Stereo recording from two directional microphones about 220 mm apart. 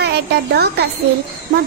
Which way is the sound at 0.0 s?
50° right (ahead or behind).